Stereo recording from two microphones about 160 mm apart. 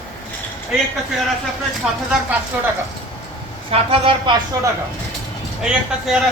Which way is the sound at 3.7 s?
35° right (ahead or behind).